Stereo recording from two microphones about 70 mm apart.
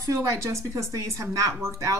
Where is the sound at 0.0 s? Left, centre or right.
Right.